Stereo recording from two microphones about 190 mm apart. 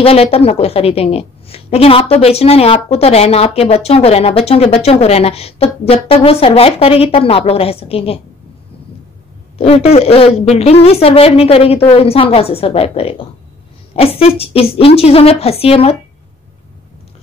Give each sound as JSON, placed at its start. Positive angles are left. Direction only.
{"t": 0.0, "sound": "a woman's voice", "side_deg": 30}
{"t": 9.6, "sound": "a woman's voice", "side_deg": 30}